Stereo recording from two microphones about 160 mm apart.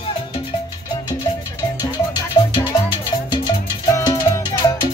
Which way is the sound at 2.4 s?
30° left (ahead or behind).